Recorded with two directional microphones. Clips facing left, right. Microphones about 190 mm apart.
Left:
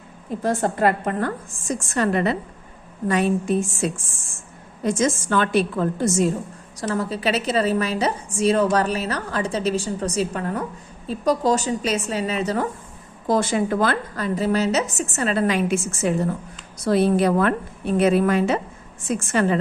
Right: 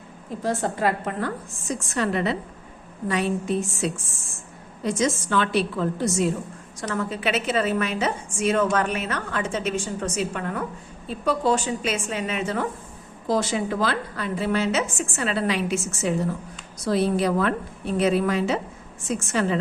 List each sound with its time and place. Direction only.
0.4 s a woman's voice: 55° left (ahead or behind)
13.2 s a woman's voice: 50° left (ahead or behind)